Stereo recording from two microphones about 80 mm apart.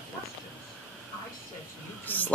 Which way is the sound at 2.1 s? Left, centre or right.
Left.